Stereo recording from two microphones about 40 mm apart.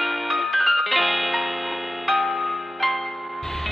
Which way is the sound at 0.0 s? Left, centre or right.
Centre.